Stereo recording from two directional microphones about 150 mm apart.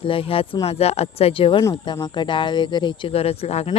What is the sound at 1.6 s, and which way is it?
Speech, 20° left (ahead or behind).